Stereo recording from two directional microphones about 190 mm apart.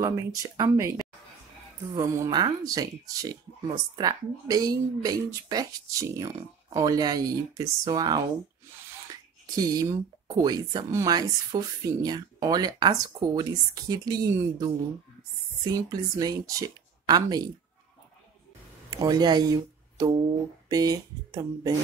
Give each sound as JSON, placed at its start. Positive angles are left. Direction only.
{"t": 0.0, "sound": "speech", "side_deg": -15}
{"t": 9.6, "sound": "speech", "side_deg": -20}
{"t": 18.9, "sound": "speech", "side_deg": -20}